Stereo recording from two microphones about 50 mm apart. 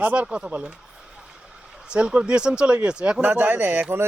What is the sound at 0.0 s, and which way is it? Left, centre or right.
Speech, right.